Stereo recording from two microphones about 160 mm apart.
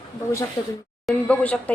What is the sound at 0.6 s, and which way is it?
Speech, 25° left (ahead or behind).